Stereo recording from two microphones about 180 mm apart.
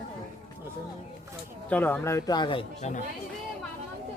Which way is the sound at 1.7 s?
10° left (ahead or behind).